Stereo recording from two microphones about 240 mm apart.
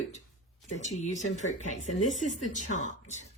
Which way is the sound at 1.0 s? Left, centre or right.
Left.